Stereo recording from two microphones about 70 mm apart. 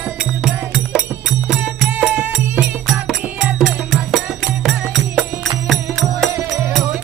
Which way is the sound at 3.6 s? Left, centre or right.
Centre.